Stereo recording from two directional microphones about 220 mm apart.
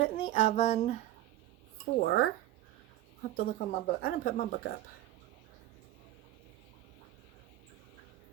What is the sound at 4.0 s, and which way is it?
Speech, 40° left (ahead or behind).